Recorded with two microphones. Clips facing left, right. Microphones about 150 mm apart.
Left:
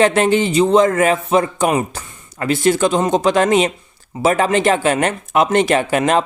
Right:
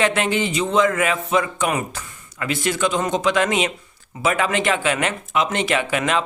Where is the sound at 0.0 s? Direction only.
35° left (ahead or behind).